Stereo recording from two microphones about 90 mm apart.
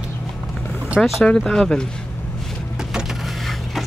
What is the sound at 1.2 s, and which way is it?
Speech, 5° left (ahead or behind).